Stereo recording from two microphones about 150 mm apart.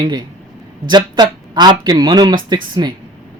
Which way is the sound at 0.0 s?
30° right (ahead or behind).